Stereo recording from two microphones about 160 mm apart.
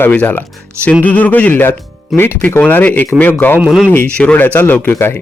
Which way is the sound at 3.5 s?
5° right (ahead or behind).